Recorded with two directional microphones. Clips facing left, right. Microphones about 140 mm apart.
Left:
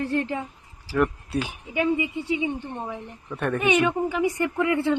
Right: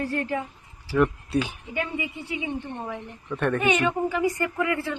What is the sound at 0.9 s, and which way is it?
Speech, 5° left (ahead or behind).